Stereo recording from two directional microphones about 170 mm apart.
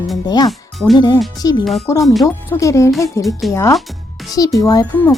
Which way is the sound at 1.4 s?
20° left (ahead or behind).